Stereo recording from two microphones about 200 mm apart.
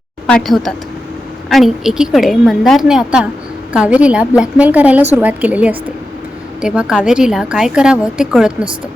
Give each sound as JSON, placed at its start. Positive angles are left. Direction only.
{"t": 0.3, "sound": "a woman's voice", "side_deg": 0}